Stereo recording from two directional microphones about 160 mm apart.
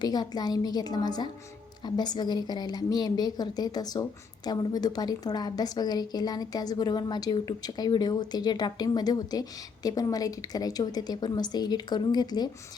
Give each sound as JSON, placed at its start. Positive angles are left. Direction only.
{"t": 0.0, "sound": "a woman's voice", "side_deg": 25}